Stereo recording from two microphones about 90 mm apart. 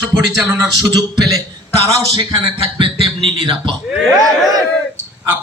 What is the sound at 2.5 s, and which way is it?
A man's voice, 75° right (ahead or behind).